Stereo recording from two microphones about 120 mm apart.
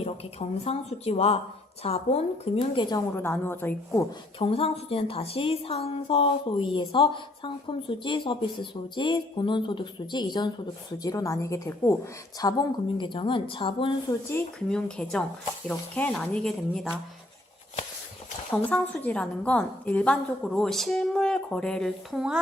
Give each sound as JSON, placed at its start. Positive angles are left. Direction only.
{"t": 0.0, "sound": "a woman's voice", "side_deg": 60}
{"t": 2.7, "sound": "a woman's voice", "side_deg": 40}
{"t": 3.2, "sound": "a woman's voice", "side_deg": 15}
{"t": 4.4, "sound": "a woman's voice", "side_deg": 50}
{"t": 14.1, "sound": "a woman's voice", "side_deg": 25}
{"t": 14.7, "sound": "a woman's voice", "side_deg": 5}
{"t": 18.5, "sound": "a woman's voice", "side_deg": 10}